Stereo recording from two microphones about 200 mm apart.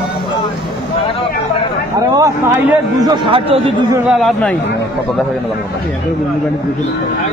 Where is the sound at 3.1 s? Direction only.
25° right (ahead or behind).